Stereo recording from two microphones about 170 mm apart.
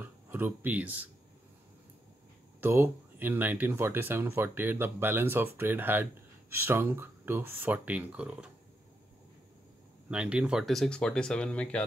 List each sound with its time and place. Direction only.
0.3 s speech: 10° right (ahead or behind)
2.6 s speech: 10° right (ahead or behind)
10.0 s speech: 5° right (ahead or behind)